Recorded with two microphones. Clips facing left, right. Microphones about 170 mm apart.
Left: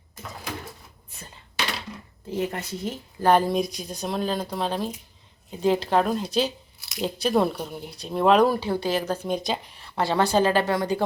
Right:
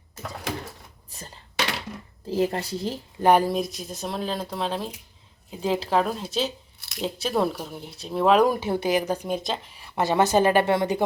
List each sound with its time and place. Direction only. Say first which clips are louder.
1.1 s a sound: right 3 dB; 35° right (ahead or behind)
2.3 s speech: right 4 dB; 35° right (ahead or behind)
3.2 s speech: even; 15° right (ahead or behind)
8.4 s speech: right 1 dB; 20° right (ahead or behind)